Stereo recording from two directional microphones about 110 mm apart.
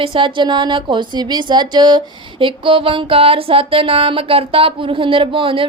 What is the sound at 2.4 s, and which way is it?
Music, 55° right (ahead or behind).